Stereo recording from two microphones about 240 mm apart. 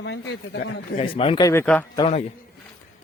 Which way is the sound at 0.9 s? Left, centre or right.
Left.